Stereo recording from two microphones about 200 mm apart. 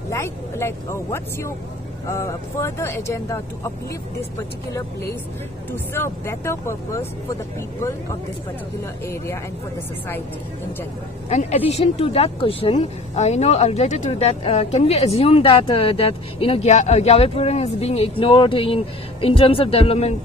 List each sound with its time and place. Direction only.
0.1 s speech: 15° left (ahead or behind)
5.7 s speech: 10° left (ahead or behind)
9.0 s speech: 10° left (ahead or behind)
11.2 s speech: 35° left (ahead or behind)